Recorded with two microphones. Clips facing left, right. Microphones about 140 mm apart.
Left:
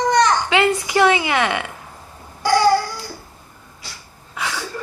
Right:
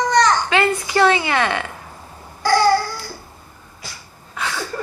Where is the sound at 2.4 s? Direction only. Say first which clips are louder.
Even; 15° left (ahead or behind).